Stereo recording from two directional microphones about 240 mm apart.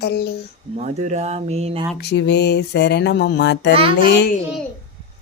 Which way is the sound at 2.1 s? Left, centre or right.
Left.